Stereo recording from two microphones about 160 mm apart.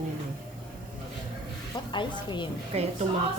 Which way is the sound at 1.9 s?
30° left (ahead or behind).